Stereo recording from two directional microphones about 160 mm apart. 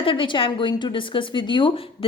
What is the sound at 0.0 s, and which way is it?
A woman's voice, 30° left (ahead or behind).